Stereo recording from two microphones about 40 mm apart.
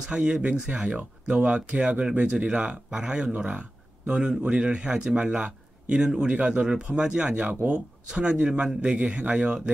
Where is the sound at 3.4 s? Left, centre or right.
Right.